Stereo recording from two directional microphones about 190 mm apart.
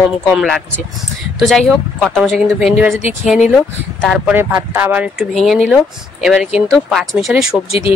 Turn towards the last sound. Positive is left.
turn(degrees=30)  # may be behind; listen again after turning